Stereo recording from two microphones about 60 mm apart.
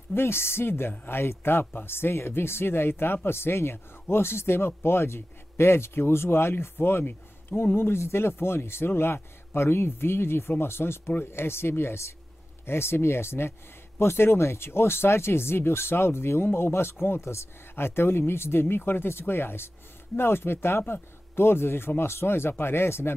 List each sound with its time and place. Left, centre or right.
0.1 s speech: left